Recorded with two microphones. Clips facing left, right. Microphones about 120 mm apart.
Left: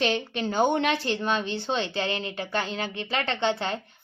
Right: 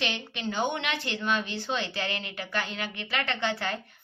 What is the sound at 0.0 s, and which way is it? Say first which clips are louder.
Speech: left 6 dB; 40° left (ahead or behind).